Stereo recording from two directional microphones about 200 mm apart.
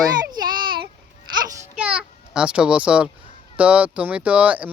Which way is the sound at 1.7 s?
5° right (ahead or behind).